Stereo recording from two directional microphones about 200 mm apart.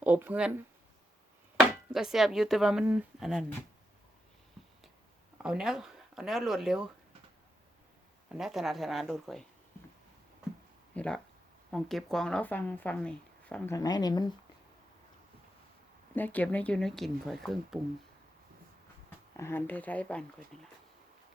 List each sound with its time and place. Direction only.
0.0 s speech: 10° right (ahead or behind)
1.9 s a woman's voice: centre (ahead or behind)
5.4 s speech: 5° right (ahead or behind)
8.3 s a woman's voice: centre (ahead or behind)
10.9 s a sound: 5° left (ahead or behind)
11.7 s a woman's voice: centre (ahead or behind)
13.7 s speech: 20° left (ahead or behind)
16.1 s a woman's voice: 10° left (ahead or behind)
19.4 s speech: 10° left (ahead or behind)